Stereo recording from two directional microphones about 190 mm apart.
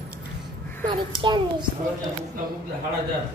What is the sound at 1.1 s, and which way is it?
Speech, 25° right (ahead or behind).